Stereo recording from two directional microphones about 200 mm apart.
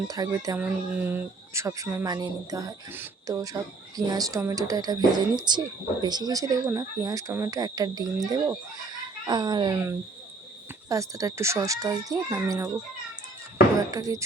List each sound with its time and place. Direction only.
0.1 s speech: 20° right (ahead or behind)
0.6 s speech: 5° right (ahead or behind)
13.9 s speech: 20° right (ahead or behind)